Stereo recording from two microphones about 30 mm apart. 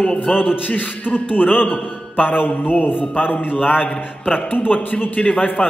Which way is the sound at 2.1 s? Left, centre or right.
Left.